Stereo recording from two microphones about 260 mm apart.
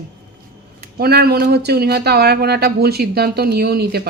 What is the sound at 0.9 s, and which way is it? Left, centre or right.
Speech, right.